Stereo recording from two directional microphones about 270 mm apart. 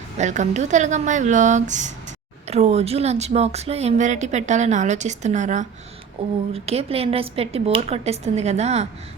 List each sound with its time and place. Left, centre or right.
0.2 s speech: right